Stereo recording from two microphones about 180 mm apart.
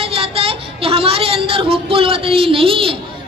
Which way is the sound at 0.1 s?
30° right (ahead or behind).